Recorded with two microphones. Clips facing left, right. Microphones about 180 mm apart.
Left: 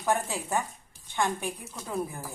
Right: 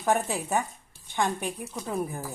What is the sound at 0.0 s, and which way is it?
A woman's voice, 15° right (ahead or behind).